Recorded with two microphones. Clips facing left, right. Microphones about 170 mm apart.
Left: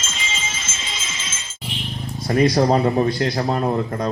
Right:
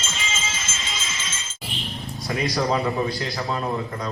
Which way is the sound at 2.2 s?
45° left (ahead or behind).